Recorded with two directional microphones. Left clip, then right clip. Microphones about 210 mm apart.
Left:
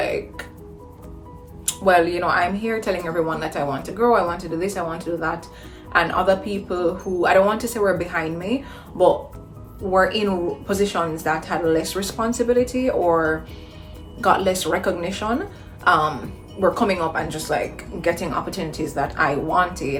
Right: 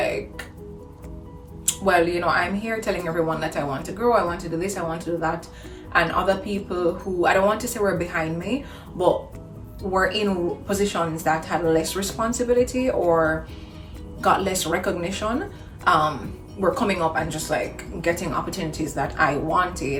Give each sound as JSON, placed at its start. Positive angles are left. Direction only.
{"t": 0.0, "sound": "music", "side_deg": 20}
{"t": 1.6, "sound": "speech", "side_deg": 20}
{"t": 9.9, "sound": "a woman's voice", "side_deg": 20}